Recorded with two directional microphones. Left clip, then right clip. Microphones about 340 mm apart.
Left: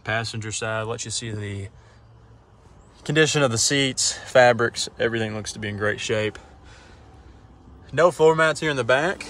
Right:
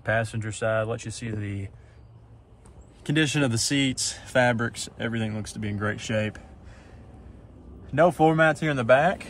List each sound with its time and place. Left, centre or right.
0.0 s speech: centre
3.0 s speech: centre
7.8 s speech: centre